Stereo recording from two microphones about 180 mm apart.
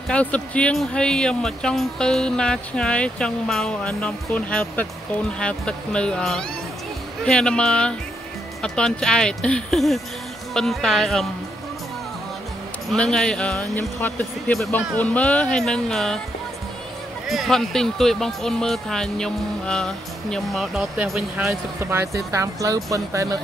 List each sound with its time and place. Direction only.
0.1 s speech: 5° left (ahead or behind)
12.9 s speech: 5° left (ahead or behind)
17.3 s speech: centre (ahead or behind)
21.9 s speech: 15° right (ahead or behind)